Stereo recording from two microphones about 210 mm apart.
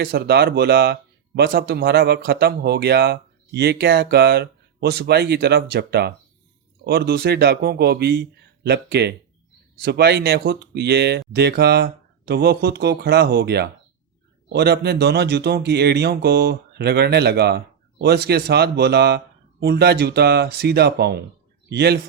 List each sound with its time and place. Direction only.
0.0 s speech: 50° right (ahead or behind)